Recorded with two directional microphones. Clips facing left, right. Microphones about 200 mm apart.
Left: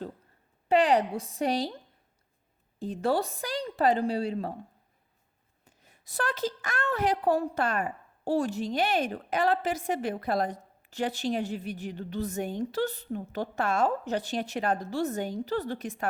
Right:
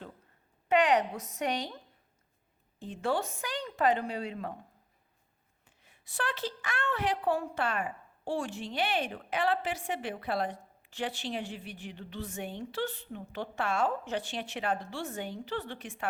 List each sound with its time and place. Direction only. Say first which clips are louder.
0.7 s a woman's voice: left 3 dB; 35° left (ahead or behind)
5.6 s a woman's voice: left 4 dB; 40° left (ahead or behind)